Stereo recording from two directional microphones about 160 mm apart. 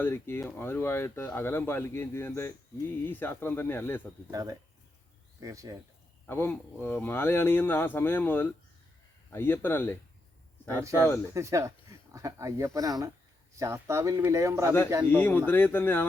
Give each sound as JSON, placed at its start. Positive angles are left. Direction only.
{"t": 0.0, "sound": "speech", "side_deg": 15}
{"t": 4.3, "sound": "speech", "side_deg": -20}
{"t": 6.2, "sound": "speech", "side_deg": 15}
{"t": 11.3, "sound": "speech", "side_deg": -20}
{"t": 15.1, "sound": "speech", "side_deg": 10}